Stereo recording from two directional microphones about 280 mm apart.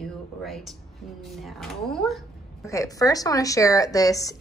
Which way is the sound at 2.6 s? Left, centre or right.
Centre.